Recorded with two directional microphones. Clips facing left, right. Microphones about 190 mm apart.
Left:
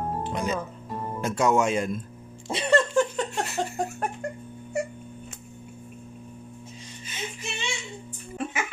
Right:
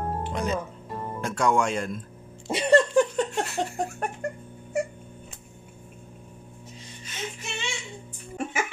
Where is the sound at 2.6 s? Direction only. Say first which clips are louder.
Right 3 dB; 15° right (ahead or behind).